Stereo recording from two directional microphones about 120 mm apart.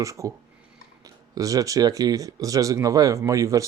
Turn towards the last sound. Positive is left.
turn(degrees=-25)  # may be behind; listen again after turning